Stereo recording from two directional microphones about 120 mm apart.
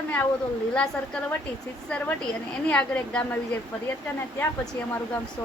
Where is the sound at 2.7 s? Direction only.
10° left (ahead or behind).